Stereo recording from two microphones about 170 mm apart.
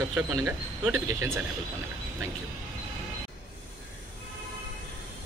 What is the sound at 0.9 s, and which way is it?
Speech, 15° right (ahead or behind).